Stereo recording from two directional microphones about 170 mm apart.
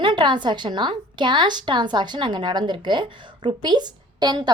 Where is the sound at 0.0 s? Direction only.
30° right (ahead or behind).